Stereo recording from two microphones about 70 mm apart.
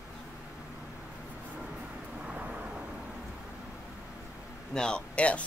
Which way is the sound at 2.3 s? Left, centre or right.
Centre.